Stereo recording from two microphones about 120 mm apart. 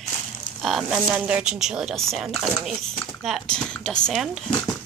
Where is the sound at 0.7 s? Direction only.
5° right (ahead or behind).